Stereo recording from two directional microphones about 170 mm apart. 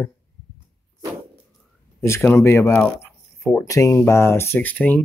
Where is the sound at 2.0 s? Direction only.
15° left (ahead or behind).